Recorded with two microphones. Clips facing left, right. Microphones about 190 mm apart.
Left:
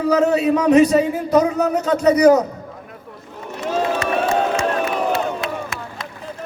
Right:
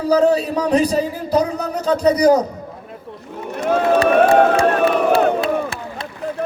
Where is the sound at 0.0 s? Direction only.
35° right (ahead or behind).